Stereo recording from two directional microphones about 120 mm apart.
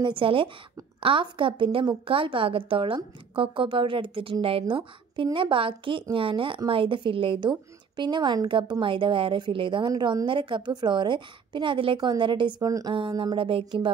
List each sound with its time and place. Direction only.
0.0 s a woman's voice: 45° right (ahead or behind)
13.1 s a woman's voice: 40° right (ahead or behind)